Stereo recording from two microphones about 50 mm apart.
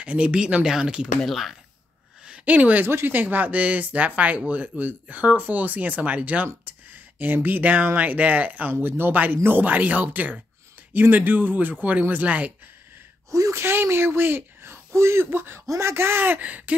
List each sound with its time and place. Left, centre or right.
0.0 s speech: right
1.2 s speech: centre
2.4 s speech: right
8.7 s speech: right
13.3 s speech: right
13.7 s speech: right
16.3 s a sound: right